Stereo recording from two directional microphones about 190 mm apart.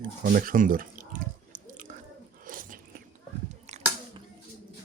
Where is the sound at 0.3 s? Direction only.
45° right (ahead or behind).